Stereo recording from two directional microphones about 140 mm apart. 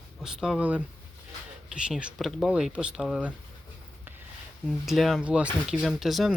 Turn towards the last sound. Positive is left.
turn(degrees=0)  # may be behind; listen again after turning